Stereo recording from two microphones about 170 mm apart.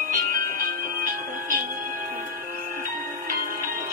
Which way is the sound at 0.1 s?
50° right (ahead or behind).